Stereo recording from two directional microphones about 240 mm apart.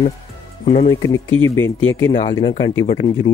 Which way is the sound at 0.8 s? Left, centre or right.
Centre.